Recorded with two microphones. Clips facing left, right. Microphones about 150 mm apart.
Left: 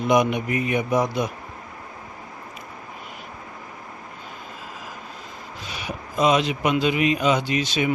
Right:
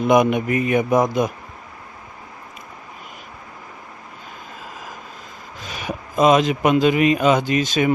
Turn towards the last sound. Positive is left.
turn(degrees=-45)  # may be behind; listen again after turning